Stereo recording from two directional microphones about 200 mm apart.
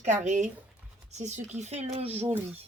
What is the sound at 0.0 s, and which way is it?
Speech, 35° right (ahead or behind).